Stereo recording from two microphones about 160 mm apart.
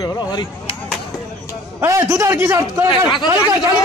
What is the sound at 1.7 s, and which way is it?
A man's voice, 20° right (ahead or behind).